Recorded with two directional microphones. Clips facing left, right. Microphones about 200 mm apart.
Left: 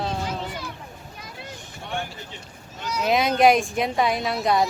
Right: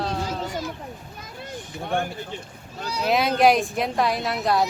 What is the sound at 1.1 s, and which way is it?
Vehicle, 50° right (ahead or behind).